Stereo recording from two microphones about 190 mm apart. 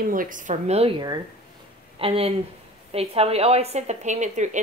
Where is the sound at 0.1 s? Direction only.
45° right (ahead or behind).